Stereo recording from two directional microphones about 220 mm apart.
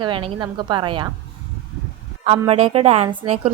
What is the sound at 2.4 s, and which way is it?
Speech, 25° right (ahead or behind).